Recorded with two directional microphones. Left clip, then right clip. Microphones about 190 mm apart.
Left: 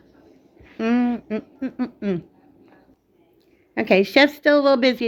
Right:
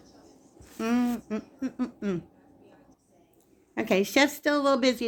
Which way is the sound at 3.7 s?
45° left (ahead or behind).